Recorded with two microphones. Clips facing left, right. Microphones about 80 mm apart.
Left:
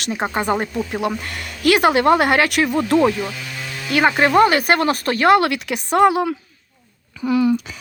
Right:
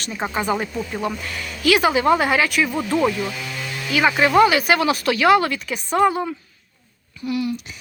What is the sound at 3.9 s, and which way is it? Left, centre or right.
Speech, left.